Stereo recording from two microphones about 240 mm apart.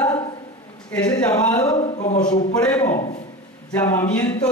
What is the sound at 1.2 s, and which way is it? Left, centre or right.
Speech, centre.